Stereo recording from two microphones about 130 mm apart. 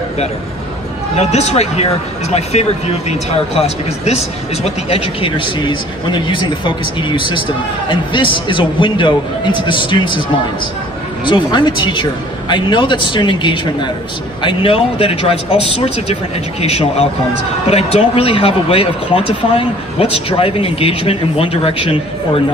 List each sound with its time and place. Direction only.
1.1 s speech: 55° left (ahead or behind); by 10.2 s 40° left (ahead or behind)
11.2 s speech: 35° left (ahead or behind)